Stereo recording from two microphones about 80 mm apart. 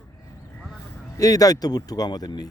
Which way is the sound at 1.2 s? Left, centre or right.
Left.